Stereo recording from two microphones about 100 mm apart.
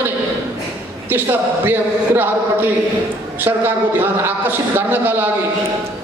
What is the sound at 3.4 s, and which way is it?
A man's voice, 20° right (ahead or behind).